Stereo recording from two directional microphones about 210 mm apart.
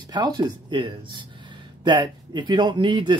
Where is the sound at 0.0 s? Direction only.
20° right (ahead or behind).